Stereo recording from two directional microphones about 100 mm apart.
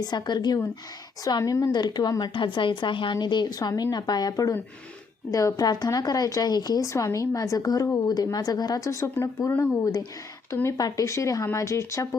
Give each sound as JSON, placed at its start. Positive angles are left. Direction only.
{"t": 0.0, "sound": "a woman's voice", "side_deg": 45}
{"t": 10.5, "sound": "speech", "side_deg": 30}